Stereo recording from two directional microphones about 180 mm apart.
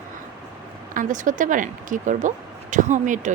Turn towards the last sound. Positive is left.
turn(degrees=-45)  # may be behind; listen again after turning